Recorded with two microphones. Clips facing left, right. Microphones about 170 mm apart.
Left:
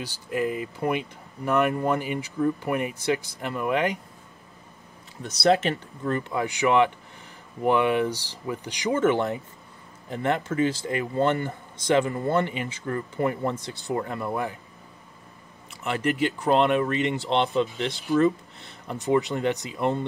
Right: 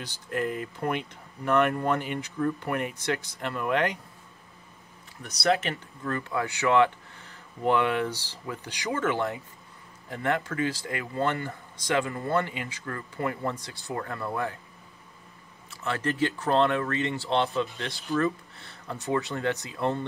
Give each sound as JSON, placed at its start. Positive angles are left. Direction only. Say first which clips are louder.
{"t": 0.3, "sound": "speech", "louder": "left 3 dB", "side_deg": 10}
{"t": 5.2, "sound": "speech", "louder": "left 5 dB", "side_deg": 30}
{"t": 15.7, "sound": "speech", "louder": "left 3 dB", "side_deg": 15}